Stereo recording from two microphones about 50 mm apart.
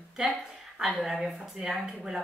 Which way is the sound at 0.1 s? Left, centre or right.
Right.